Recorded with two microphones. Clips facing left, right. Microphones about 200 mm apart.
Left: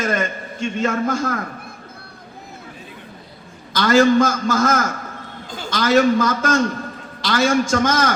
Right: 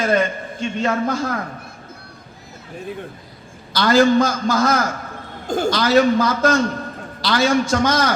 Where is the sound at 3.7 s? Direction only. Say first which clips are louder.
Even; 35° right (ahead or behind).